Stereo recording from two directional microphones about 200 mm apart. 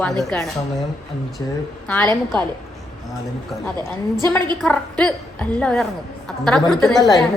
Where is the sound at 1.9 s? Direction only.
5° left (ahead or behind).